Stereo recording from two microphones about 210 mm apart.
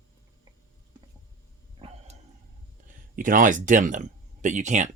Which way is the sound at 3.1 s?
40° right (ahead or behind).